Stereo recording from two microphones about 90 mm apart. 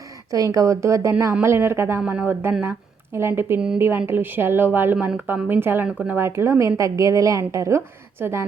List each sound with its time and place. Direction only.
0.3 s a woman's voice: 40° right (ahead or behind)
2.0 s a woman's voice: 15° right (ahead or behind)